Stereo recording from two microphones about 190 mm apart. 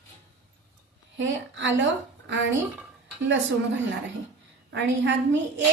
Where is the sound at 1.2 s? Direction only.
75° right (ahead or behind).